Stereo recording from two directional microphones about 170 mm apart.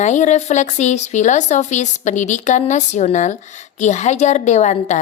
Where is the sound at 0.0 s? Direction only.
45° left (ahead or behind).